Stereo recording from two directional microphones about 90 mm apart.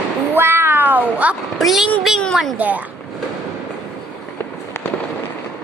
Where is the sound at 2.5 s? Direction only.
20° right (ahead or behind).